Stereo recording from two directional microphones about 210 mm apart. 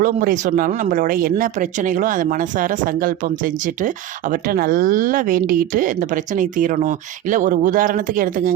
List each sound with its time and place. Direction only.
0.0 s speech: 40° right (ahead or behind)